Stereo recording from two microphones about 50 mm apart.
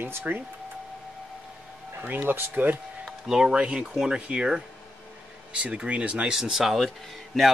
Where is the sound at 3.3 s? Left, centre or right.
Centre.